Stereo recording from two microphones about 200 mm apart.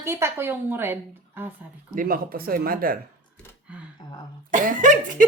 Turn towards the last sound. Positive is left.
turn(degrees=-40)  # may be behind; listen again after turning